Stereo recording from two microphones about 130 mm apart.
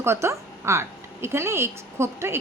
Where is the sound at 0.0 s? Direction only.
20° right (ahead or behind).